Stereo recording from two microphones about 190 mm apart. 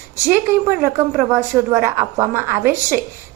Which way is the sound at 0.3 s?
10° right (ahead or behind).